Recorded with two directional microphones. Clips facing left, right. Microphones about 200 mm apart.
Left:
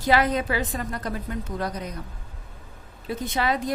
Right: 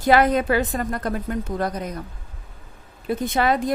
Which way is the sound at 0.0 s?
55° right (ahead or behind).